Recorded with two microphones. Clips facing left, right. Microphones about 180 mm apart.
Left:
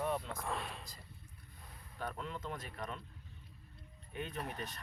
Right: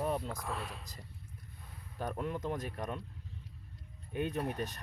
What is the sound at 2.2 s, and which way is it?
Speech, 45° right (ahead or behind).